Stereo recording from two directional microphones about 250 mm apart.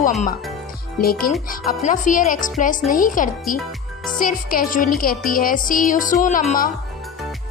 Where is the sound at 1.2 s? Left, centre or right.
Left.